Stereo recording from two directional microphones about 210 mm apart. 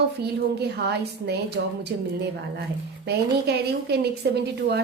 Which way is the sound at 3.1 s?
50° right (ahead or behind).